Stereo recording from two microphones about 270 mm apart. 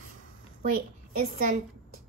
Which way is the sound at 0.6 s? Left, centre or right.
Right.